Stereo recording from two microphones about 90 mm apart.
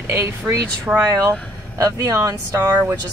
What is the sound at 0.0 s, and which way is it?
A woman's voice, 30° right (ahead or behind).